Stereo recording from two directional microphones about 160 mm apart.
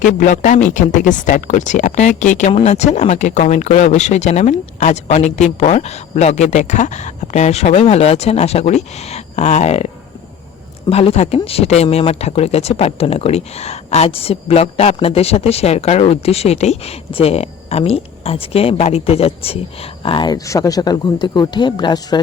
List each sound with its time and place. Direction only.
0.0 s speech: 50° left (ahead or behind)
2.5 s speech: 40° left (ahead or behind)